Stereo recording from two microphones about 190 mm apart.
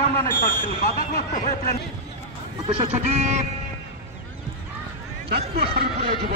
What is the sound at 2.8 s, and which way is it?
Speech, 35° right (ahead or behind).